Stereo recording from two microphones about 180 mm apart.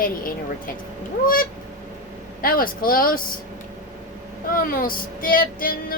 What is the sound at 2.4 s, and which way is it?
Female singing, 55° left (ahead or behind).